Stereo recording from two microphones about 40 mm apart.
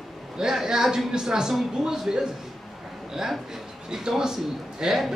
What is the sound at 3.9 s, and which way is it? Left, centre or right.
A man's voice, centre.